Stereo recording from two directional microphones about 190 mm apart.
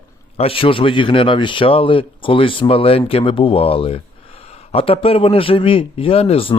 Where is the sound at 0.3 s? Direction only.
30° left (ahead or behind).